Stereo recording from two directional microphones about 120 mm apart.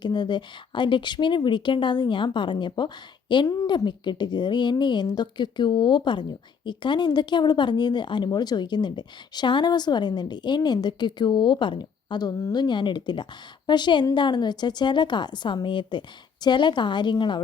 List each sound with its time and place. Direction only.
0.0 s speech: 40° left (ahead or behind)
3.4 s speech: 30° left (ahead or behind)